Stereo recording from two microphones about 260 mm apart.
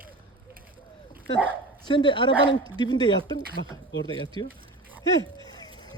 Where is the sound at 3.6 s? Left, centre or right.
Left.